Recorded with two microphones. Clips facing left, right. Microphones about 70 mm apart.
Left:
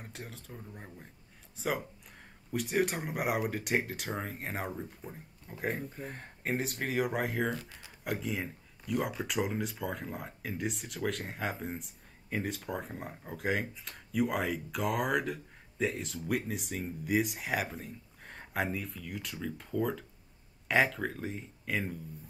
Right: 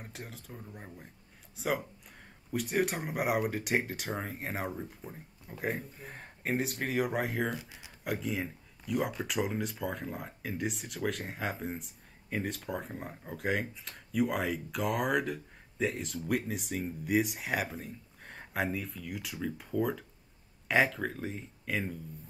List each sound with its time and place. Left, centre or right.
0.0 s speech: centre
7.5 s speech: centre
8.0 s speech: centre